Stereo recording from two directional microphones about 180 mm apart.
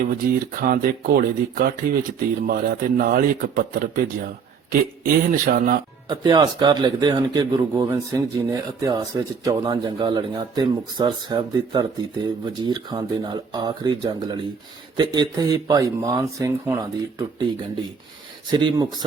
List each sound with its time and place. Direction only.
0.3 s speech: 55° right (ahead or behind)
6.1 s a man's voice: 25° right (ahead or behind)
18.5 s a man's voice: 25° right (ahead or behind)